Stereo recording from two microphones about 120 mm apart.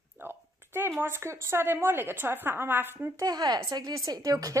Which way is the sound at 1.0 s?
20° right (ahead or behind).